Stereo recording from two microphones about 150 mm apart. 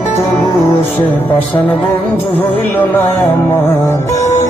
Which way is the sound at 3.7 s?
20° left (ahead or behind).